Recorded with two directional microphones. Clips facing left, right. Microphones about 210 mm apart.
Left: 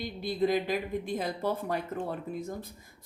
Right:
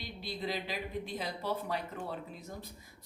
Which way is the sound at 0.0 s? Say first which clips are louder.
Left 10 dB; 50° left (ahead or behind).